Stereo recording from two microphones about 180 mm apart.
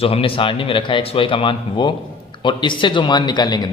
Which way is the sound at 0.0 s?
30° left (ahead or behind).